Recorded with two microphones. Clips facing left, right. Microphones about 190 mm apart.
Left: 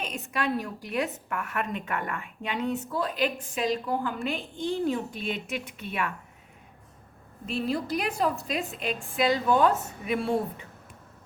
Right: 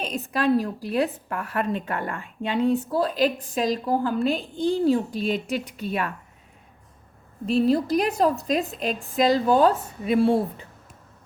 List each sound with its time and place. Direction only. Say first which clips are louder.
0.0 s a woman's voice: right 6 dB; 35° right (ahead or behind)
7.4 s a woman's voice: right 9 dB; 40° right (ahead or behind)